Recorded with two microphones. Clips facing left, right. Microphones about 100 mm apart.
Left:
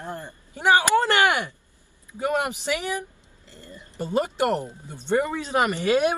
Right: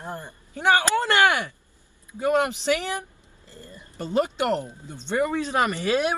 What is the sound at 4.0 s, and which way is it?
Speech, 15° left (ahead or behind).